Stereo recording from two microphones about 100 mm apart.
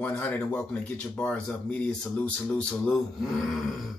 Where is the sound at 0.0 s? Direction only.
15° left (ahead or behind).